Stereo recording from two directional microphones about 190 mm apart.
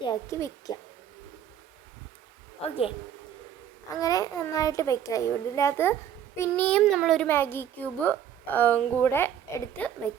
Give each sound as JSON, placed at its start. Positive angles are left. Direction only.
{"t": 0.0, "sound": "a woman's voice", "side_deg": 20}
{"t": 2.6, "sound": "speech", "side_deg": 30}
{"t": 4.0, "sound": "a child's voice", "side_deg": 20}
{"t": 7.3, "sound": "a child's voice", "side_deg": 10}